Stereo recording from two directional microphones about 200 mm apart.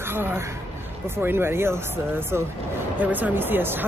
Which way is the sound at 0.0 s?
10° right (ahead or behind).